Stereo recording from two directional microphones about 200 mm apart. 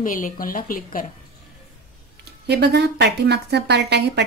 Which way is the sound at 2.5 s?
55° right (ahead or behind).